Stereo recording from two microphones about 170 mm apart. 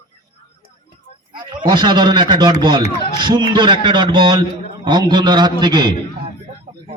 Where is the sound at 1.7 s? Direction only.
25° right (ahead or behind).